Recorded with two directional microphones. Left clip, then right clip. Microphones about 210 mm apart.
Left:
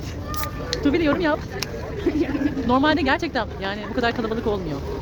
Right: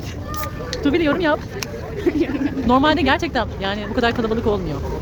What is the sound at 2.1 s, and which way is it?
Speech, 45° right (ahead or behind).